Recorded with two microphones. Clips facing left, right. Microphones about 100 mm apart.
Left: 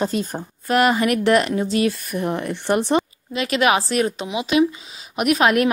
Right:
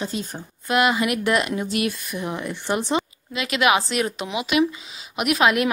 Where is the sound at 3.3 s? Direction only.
40° left (ahead or behind).